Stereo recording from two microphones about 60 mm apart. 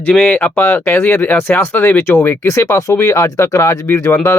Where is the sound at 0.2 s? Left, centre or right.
Left.